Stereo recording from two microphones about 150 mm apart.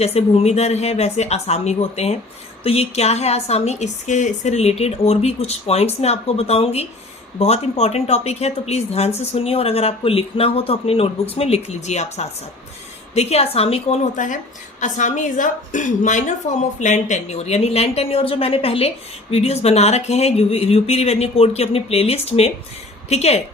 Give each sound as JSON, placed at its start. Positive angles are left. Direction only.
{"t": 0.0, "sound": "a woman's voice", "side_deg": 40}